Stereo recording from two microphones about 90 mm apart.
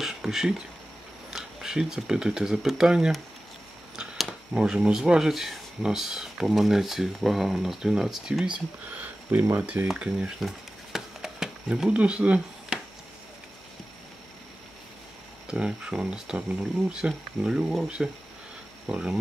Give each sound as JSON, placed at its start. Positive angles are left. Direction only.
{"t": 0.0, "sound": "speech", "side_deg": -5}
{"t": 3.9, "sound": "a sound", "side_deg": -5}
{"t": 4.6, "sound": "speech", "side_deg": -10}
{"t": 8.9, "sound": "speech", "side_deg": -20}
{"t": 10.4, "sound": "a sound", "side_deg": -5}
{"t": 15.4, "sound": "speech", "side_deg": -10}